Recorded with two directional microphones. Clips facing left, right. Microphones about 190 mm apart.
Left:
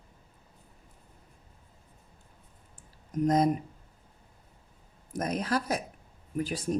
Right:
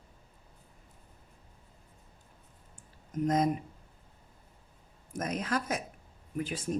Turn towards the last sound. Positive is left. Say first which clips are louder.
# left 3 dB
turn(degrees=40)  # may be behind; listen again after turning